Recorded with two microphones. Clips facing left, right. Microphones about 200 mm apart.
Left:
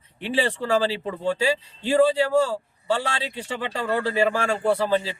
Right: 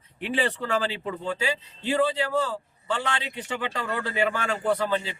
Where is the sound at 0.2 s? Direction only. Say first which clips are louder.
Left 3 dB; 30° left (ahead or behind).